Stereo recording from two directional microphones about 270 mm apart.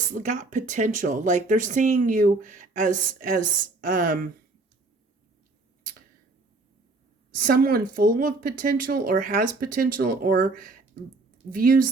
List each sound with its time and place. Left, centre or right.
0.1 s speech: right
7.3 s speech: right